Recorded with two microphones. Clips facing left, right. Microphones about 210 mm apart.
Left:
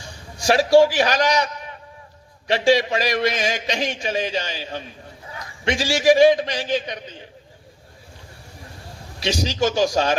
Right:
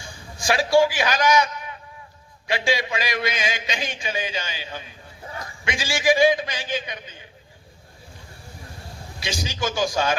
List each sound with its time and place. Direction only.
0.0 s a man's voice: 40° left (ahead or behind)
9.2 s a man's voice: 40° left (ahead or behind)